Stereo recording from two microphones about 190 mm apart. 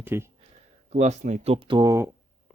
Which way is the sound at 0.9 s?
40° right (ahead or behind).